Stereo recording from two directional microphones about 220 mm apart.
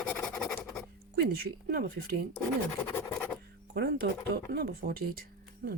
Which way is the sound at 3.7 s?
45° right (ahead or behind).